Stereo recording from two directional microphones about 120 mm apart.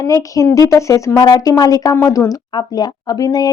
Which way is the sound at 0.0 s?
30° left (ahead or behind).